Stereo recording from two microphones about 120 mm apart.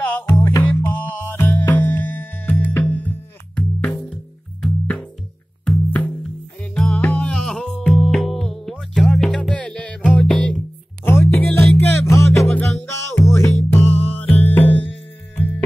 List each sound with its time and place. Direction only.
0.0 s music: 20° left (ahead or behind)
4.1 s music: 5° left (ahead or behind)
11.1 s music: 20° left (ahead or behind)